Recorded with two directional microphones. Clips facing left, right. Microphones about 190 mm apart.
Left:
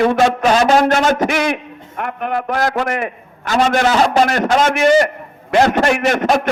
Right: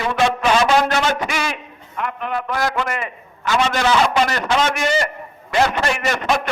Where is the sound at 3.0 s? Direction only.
55° left (ahead or behind).